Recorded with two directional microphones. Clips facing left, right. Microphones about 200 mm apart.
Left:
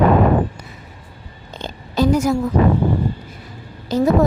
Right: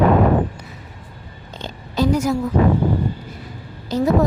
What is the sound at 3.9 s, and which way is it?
Speech, 45° left (ahead or behind).